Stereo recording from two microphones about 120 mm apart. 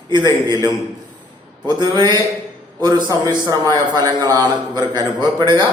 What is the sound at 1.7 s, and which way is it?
A man's voice, 40° right (ahead or behind).